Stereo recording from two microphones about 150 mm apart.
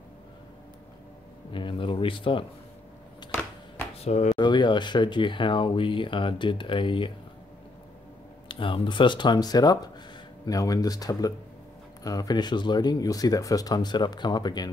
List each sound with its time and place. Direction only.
1.5 s a sound: 35° left (ahead or behind)
4.0 s speech: 45° left (ahead or behind)
4.4 s speech: 30° left (ahead or behind)
8.5 s speech: 35° left (ahead or behind)